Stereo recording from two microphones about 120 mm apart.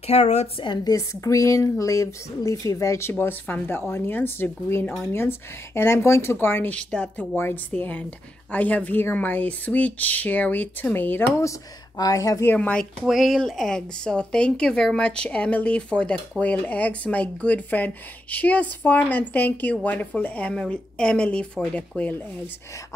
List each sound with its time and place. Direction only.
0.0 s speech: 60° left (ahead or behind)
0.7 s speech: 30° left (ahead or behind)
12.0 s speech: 30° left (ahead or behind)
12.4 s speech: 10° left (ahead or behind)